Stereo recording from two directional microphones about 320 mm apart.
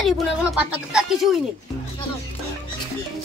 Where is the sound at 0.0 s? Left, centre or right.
Centre.